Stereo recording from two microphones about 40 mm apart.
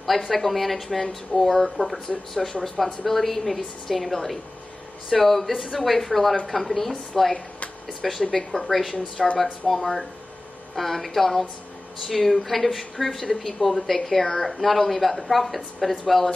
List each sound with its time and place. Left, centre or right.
0.3 s a woman's voice: centre
8.2 s speech: centre
8.5 s a woman's voice: centre